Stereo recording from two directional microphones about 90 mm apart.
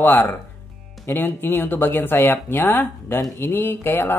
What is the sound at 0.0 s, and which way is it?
A man's voice, 20° left (ahead or behind).